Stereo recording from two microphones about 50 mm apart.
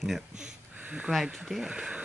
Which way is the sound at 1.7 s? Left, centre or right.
Centre.